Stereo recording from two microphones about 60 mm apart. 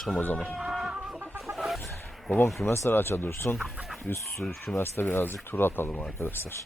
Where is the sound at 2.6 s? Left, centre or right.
Left.